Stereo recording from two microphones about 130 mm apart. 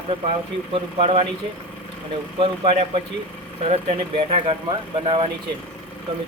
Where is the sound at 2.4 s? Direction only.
45° right (ahead or behind).